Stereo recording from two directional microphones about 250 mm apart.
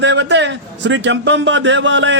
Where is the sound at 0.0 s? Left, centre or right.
Right.